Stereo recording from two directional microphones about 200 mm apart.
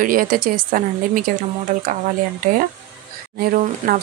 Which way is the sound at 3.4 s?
45° right (ahead or behind).